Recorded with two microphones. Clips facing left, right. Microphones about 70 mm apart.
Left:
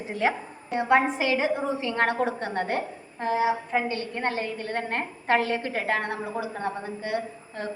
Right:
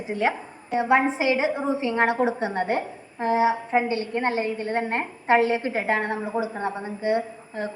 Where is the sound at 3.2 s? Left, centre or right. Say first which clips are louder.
Right 3 dB; right.